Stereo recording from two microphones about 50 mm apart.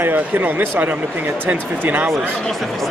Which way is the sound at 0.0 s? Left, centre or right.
Right.